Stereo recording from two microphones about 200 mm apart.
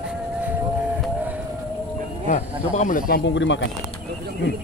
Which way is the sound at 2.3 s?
40° left (ahead or behind).